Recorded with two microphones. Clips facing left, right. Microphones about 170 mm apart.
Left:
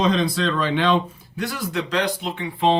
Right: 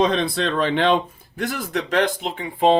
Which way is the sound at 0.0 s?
55° right (ahead or behind).